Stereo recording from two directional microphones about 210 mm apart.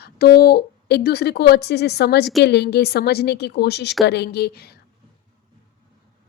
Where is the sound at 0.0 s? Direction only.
50° left (ahead or behind).